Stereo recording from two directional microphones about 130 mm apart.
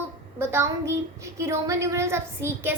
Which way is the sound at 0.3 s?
20° right (ahead or behind).